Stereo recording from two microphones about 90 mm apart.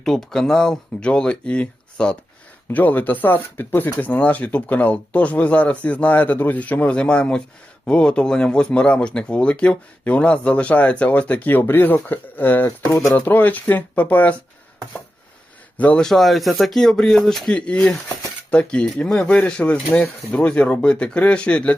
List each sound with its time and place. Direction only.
0.0 s speech: 5° left (ahead or behind)
15.8 s speech: 15° left (ahead or behind)
16.0 s speech: centre (ahead or behind)